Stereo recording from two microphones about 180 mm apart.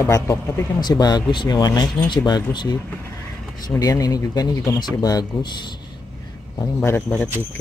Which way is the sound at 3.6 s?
20° left (ahead or behind).